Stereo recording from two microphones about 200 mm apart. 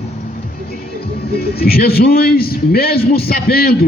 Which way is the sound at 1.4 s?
50° left (ahead or behind).